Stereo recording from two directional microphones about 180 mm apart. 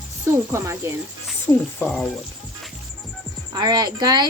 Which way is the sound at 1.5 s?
5° left (ahead or behind).